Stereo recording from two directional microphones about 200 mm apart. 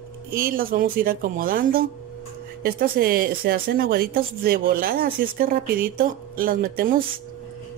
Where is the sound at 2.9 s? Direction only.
50° right (ahead or behind).